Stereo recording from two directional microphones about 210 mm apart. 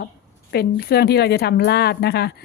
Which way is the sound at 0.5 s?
45° left (ahead or behind).